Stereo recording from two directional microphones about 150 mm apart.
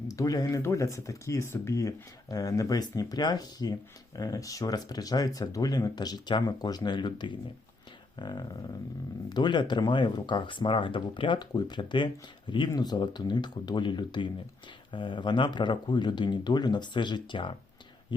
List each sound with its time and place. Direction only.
0.1 s speech: 25° left (ahead or behind)